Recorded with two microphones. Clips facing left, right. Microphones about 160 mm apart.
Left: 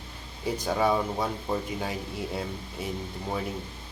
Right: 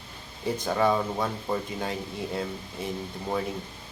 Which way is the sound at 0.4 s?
10° left (ahead or behind).